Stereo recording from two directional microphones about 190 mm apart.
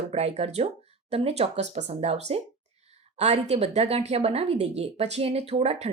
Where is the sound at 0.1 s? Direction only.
35° right (ahead or behind).